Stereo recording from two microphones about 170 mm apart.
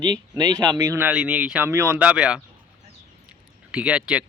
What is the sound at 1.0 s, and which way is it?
Speech, 5° right (ahead or behind).